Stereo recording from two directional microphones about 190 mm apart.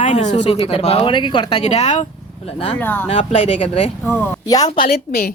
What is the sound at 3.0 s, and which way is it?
Speech, 30° left (ahead or behind).